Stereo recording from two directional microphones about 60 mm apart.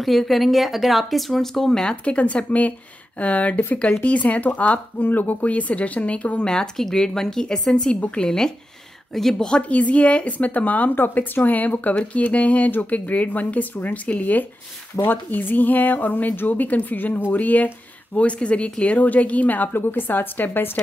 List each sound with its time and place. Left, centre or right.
0.0 s a woman's voice: centre
8.3 s speech: centre
9.6 s a woman's voice: left